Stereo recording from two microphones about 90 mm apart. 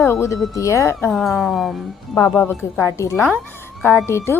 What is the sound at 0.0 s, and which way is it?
A woman's voice, 30° left (ahead or behind).